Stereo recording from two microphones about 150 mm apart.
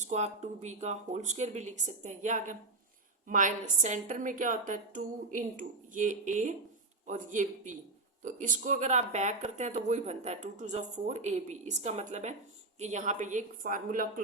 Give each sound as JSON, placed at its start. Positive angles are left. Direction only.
{"t": 0.0, "sound": "a woman's voice", "side_deg": -50}